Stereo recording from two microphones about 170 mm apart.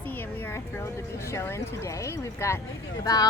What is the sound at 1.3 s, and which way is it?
A woman's voice, 15° left (ahead or behind).